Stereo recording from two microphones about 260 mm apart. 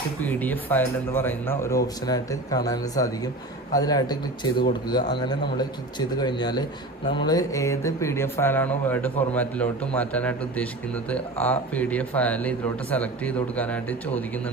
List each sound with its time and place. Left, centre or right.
0.2 s a man's voice: centre